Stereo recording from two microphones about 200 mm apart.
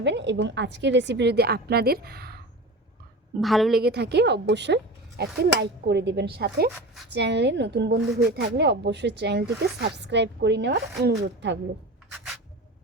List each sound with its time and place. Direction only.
0.0 s speech: 60° right (ahead or behind)
3.4 s a woman's voice: centre (ahead or behind)
3.8 s speech: 55° right (ahead or behind)
12.1 s a sound: centre (ahead or behind)